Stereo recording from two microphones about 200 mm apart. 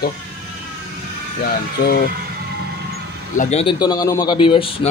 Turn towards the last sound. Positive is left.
turn(degrees=25)  # may be behind; listen again after turning